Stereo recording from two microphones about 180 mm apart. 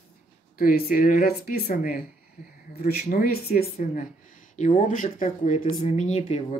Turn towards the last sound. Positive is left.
turn(degrees=35)  # may be behind; listen again after turning